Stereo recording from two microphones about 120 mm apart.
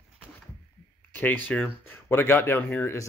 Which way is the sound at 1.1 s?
15° left (ahead or behind).